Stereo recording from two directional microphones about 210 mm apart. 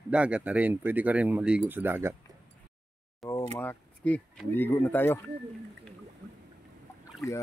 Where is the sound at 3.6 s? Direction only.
10° left (ahead or behind).